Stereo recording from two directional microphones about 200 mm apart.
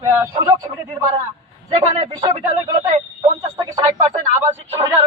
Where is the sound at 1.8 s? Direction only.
35° right (ahead or behind).